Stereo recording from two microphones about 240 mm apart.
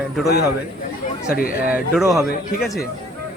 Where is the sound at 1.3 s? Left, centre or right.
Left.